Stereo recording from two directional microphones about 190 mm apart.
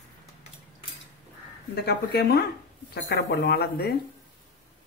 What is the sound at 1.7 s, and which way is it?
Speech, 60° left (ahead or behind).